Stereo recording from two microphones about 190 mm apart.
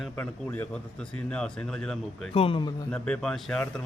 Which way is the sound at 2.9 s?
5° left (ahead or behind).